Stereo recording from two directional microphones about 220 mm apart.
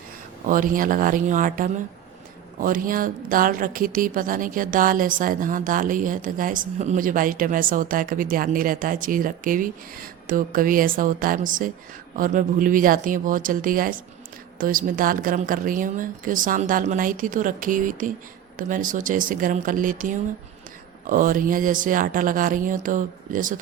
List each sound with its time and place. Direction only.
0.4 s a woman's voice: 40° right (ahead or behind)